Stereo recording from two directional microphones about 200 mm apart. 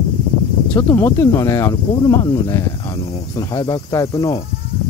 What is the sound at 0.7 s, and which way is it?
Speech, 10° left (ahead or behind).